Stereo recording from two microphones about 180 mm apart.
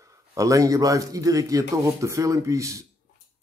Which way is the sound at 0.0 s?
20° right (ahead or behind).